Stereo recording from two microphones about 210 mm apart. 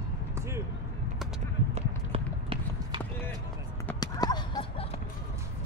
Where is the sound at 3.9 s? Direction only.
20° left (ahead or behind).